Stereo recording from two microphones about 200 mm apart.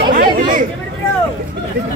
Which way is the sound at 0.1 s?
45° right (ahead or behind).